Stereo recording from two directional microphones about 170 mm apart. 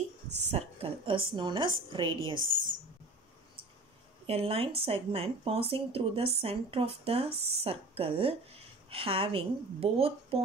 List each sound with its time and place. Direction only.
0.5 s a woman's voice: 35° right (ahead or behind)
4.3 s speech: 35° right (ahead or behind)
7.2 s speech: 70° right (ahead or behind)
7.6 s speech: 35° right (ahead or behind)